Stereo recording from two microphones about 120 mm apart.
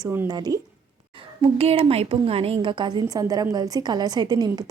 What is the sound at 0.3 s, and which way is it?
Speech, 35° right (ahead or behind).